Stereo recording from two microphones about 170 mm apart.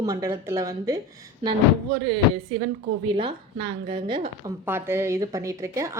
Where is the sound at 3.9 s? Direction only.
30° right (ahead or behind).